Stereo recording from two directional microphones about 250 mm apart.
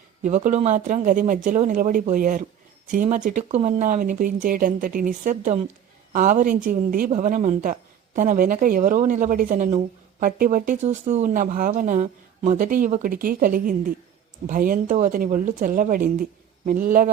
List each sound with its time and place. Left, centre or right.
0.2 s a woman's voice: right